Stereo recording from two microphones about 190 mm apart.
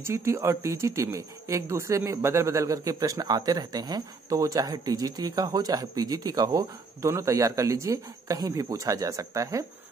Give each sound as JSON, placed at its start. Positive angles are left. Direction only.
{"t": 0.0, "sound": "speech", "side_deg": -15}